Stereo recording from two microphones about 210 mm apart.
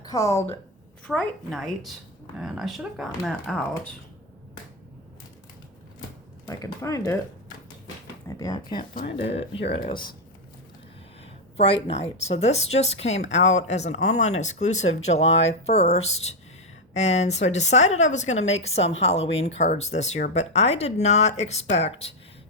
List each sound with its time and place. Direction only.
0.0 s a woman's voice: 15° left (ahead or behind)
1.0 s speech: 5° left (ahead or behind)
6.4 s speech: 15° left (ahead or behind)
8.3 s speech: 15° left (ahead or behind)
11.5 s a woman's voice: 25° left (ahead or behind)